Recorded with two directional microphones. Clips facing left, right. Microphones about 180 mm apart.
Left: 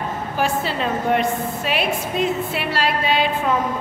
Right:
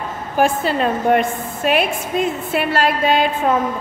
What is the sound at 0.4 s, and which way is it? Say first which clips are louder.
A woman's voice: right 6 dB; 50° right (ahead or behind).